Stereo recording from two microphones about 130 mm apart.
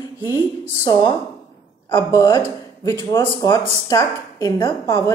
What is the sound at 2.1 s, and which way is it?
Speech, 30° left (ahead or behind).